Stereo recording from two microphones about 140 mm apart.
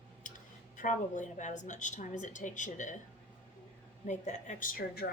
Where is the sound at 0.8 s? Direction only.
65° left (ahead or behind).